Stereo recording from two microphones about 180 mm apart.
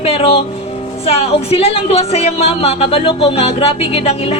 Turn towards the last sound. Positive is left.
turn(degrees=35)  # may be behind; listen again after turning